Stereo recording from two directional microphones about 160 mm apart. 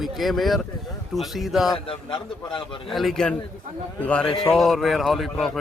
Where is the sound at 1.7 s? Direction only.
35° left (ahead or behind).